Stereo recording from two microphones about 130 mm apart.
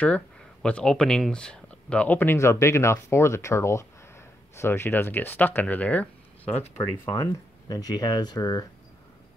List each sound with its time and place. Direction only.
0.0 s speech: 10° left (ahead or behind)
7.1 s speech: 30° left (ahead or behind)